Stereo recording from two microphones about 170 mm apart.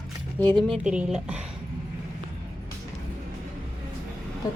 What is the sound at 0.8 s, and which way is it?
Speech, 5° right (ahead or behind).